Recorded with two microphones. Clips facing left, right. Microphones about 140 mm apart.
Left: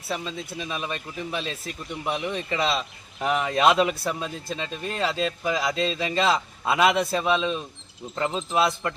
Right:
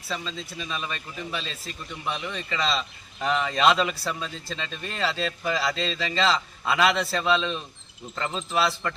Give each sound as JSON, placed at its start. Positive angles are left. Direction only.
{"t": 0.1, "sound": "a man's voice", "side_deg": 20}